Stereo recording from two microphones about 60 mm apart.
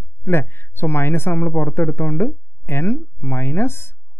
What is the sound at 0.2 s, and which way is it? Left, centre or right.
Speech, left.